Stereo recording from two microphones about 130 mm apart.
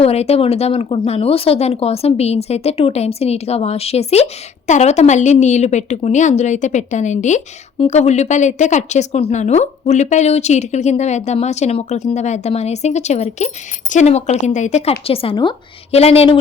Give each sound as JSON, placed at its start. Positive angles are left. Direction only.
{"t": 0.0, "sound": "a woman's voice", "side_deg": 50}